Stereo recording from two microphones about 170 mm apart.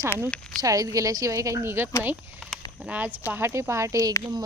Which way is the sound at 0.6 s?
20° right (ahead or behind).